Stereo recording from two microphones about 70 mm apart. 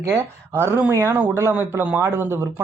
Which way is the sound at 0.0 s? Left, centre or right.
Right.